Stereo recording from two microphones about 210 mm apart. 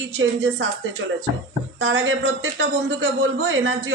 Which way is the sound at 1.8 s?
65° right (ahead or behind).